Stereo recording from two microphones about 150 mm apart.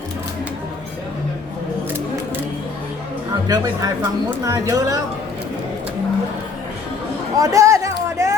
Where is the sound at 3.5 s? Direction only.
25° right (ahead or behind).